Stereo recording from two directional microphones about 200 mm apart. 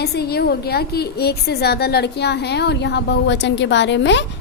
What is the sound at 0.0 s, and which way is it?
A woman's voice, 55° left (ahead or behind).